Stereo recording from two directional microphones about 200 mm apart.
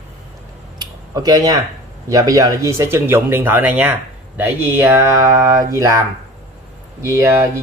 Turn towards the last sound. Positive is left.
turn(degrees=-15)  # may be behind; listen again after turning